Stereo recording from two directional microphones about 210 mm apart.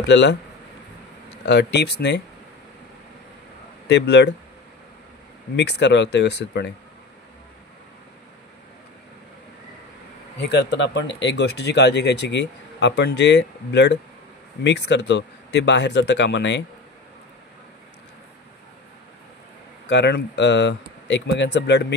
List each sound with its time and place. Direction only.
0.0 s speech: 55° left (ahead or behind)
1.4 s speech: 50° left (ahead or behind)
3.8 s speech: 55° left (ahead or behind)
5.6 s speech: 55° left (ahead or behind)
10.4 s speech: 55° left (ahead or behind)
19.9 s speech: 55° left (ahead or behind)